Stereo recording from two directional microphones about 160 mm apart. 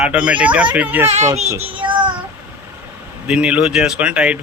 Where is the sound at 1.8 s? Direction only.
30° right (ahead or behind).